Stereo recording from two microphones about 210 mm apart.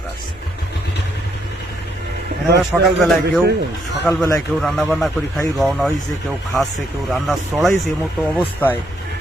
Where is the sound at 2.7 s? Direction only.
5° right (ahead or behind).